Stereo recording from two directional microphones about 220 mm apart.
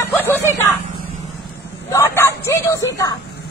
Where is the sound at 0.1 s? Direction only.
10° left (ahead or behind).